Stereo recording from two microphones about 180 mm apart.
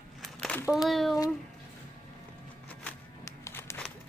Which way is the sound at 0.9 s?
Centre (ahead or behind).